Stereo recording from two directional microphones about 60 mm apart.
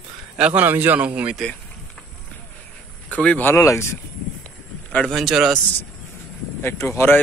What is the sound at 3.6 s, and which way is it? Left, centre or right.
Speech, left.